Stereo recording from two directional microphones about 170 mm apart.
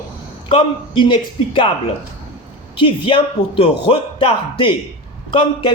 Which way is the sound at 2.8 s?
30° left (ahead or behind).